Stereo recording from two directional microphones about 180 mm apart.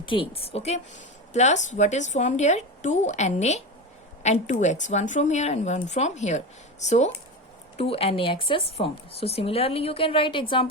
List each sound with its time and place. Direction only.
0.0 s a woman's voice: 30° left (ahead or behind)